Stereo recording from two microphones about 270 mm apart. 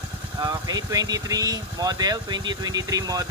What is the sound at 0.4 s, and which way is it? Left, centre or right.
Speech, centre.